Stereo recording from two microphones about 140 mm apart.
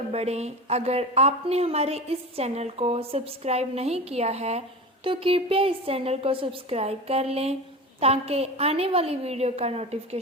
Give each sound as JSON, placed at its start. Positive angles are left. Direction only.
{"t": 0.1, "sound": "speech", "side_deg": -50}